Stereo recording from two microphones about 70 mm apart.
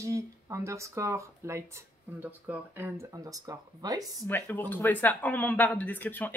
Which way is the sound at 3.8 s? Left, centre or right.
Right.